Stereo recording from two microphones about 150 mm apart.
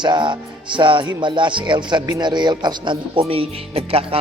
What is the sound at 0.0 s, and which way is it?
Speech, 30° right (ahead or behind).